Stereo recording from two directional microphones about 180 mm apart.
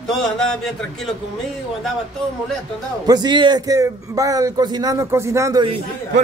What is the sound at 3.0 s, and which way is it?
A man's voice, 25° right (ahead or behind).